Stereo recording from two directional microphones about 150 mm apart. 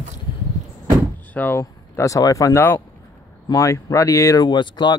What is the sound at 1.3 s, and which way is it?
Speech, 10° left (ahead or behind).